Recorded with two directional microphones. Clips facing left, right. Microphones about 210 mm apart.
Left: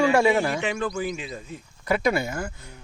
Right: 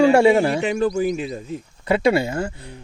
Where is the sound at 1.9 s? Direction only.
30° right (ahead or behind).